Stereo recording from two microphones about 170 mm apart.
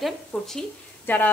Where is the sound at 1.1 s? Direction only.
10° left (ahead or behind).